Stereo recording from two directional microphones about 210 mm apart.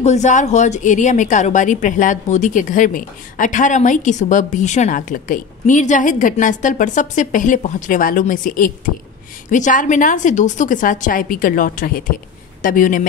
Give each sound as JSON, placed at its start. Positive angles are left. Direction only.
{"t": 0.0, "sound": "a woman's voice", "side_deg": 35}